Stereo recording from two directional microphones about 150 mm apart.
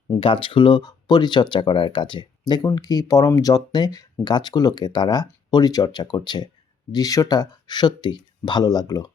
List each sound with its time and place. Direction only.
0.2 s speech: 35° left (ahead or behind)